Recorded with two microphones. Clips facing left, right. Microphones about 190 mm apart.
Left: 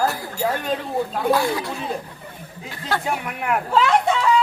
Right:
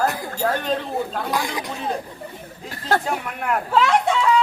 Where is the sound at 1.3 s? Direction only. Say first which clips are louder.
Left 9 dB; 15° right (ahead or behind).